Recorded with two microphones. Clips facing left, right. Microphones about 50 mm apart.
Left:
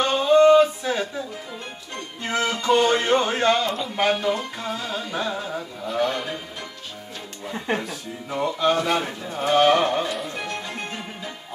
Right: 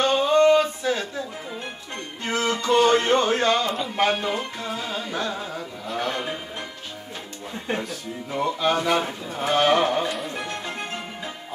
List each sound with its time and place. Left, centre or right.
0.0 s a sound: centre
2.2 s music: centre
3.1 s speech: centre
3.6 s speech: centre
4.2 s music: centre
4.6 s speech: centre
5.1 s speech: centre
5.5 s a sound: centre
6.1 s music: centre
8.3 s speech: centre